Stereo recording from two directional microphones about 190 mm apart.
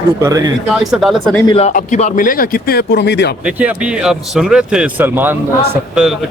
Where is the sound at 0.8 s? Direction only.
Centre (ahead or behind).